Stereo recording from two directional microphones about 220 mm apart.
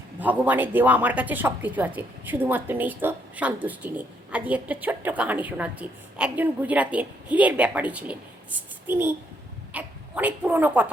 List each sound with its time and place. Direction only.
0.2 s speech: 5° right (ahead or behind)